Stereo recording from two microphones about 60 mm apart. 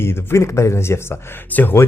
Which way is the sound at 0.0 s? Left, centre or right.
Left.